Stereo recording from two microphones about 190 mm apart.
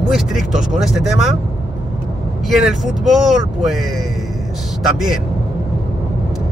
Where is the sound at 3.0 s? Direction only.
Centre (ahead or behind).